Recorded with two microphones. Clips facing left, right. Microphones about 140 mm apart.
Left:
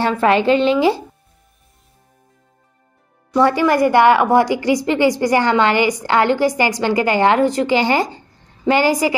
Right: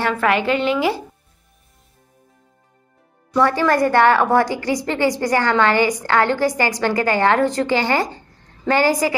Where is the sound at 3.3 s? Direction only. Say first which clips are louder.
Left 2 dB; 15° left (ahead or behind).